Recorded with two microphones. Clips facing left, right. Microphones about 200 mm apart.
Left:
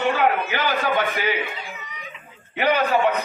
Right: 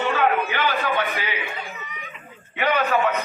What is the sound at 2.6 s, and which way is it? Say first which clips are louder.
Speech: left 2 dB; 35° left (ahead or behind).